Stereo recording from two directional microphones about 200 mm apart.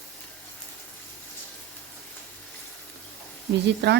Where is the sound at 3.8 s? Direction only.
60° right (ahead or behind).